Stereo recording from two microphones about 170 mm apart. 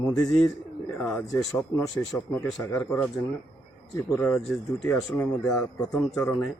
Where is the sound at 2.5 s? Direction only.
5° left (ahead or behind).